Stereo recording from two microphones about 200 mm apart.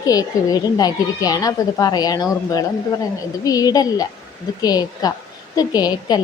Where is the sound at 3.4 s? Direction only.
20° left (ahead or behind).